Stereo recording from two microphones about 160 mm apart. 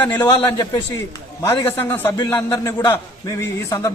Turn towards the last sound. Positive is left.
turn(degrees=20)  # may be behind; listen again after turning